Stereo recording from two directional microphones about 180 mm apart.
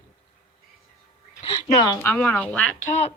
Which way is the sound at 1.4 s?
25° left (ahead or behind).